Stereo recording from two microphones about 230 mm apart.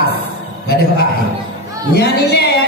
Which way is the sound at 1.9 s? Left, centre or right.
Left.